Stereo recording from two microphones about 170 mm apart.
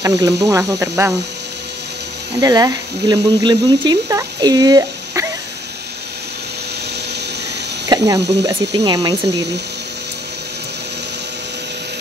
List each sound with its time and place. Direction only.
0.0 s speech: 20° right (ahead or behind)
2.4 s speech: 20° right (ahead or behind)
8.2 s speech: 85° right
8.5 s speech: 20° right (ahead or behind)